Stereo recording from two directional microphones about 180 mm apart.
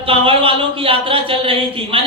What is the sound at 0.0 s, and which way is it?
Speech, 30° right (ahead or behind).